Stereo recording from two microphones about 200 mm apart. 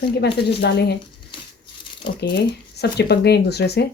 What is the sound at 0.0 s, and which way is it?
Speech, 55° left (ahead or behind).